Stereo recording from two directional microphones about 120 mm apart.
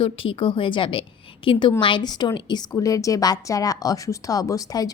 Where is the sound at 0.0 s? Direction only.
45° left (ahead or behind).